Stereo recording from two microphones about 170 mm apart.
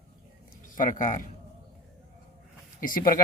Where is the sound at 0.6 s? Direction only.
50° left (ahead or behind).